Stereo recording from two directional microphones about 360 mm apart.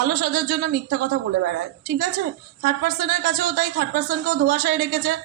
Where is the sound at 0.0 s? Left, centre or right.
Right.